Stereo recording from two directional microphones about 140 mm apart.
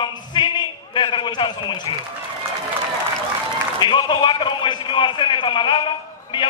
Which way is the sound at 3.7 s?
35° left (ahead or behind).